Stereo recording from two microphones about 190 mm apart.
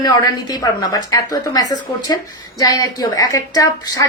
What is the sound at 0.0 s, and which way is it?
A woman's voice, 20° left (ahead or behind).